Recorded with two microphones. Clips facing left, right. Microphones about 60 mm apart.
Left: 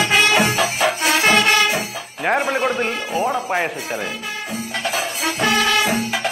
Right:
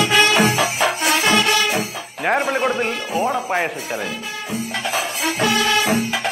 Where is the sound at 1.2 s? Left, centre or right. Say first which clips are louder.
Left 3 dB; left.